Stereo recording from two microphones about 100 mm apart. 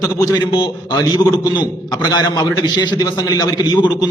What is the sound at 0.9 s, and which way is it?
A man's voice, 40° left (ahead or behind).